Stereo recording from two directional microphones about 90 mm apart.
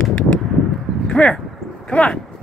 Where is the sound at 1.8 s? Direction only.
10° left (ahead or behind).